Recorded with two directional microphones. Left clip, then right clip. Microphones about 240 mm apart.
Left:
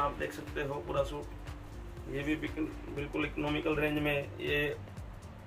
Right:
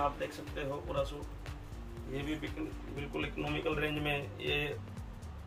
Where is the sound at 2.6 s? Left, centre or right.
Centre.